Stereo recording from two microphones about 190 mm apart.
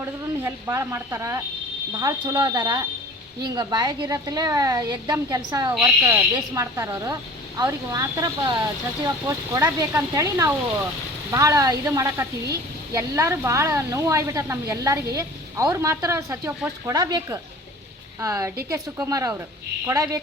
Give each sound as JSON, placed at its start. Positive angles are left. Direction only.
{"t": 0.0, "sound": "a woman's voice", "side_deg": -15}